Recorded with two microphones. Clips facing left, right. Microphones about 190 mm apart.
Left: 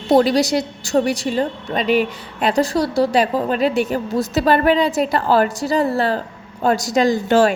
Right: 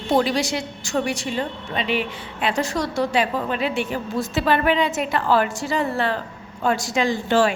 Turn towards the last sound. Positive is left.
turn(degrees=40)  # may be behind; listen again after turning